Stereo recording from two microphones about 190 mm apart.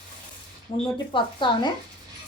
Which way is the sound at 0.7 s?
30° left (ahead or behind).